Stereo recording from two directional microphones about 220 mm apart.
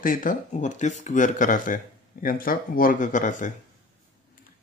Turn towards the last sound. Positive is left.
turn(degrees=35)  # may be behind; listen again after turning